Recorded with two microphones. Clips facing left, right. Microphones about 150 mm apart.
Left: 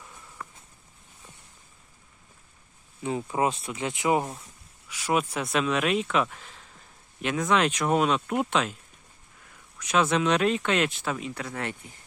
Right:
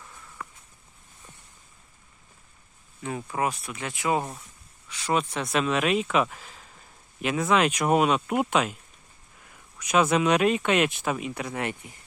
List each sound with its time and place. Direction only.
3.0 s speech: 20° left (ahead or behind)
4.9 s speech: 10° left (ahead or behind); by 8.7 s 10° right (ahead or behind)
9.7 s speech: 10° right (ahead or behind)